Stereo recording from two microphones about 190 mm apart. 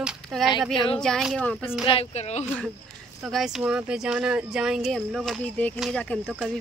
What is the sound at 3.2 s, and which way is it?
Speech, centre (ahead or behind).